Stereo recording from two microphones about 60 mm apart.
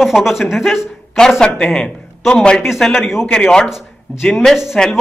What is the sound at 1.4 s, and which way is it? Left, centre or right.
A man's voice, centre.